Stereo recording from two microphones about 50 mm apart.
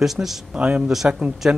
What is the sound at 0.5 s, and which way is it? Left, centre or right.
Speech, right.